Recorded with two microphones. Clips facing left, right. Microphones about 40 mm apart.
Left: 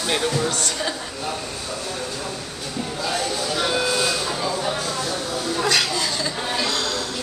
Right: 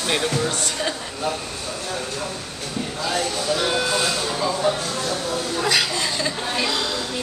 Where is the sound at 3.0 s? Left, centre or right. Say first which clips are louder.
Right 1 dB; centre.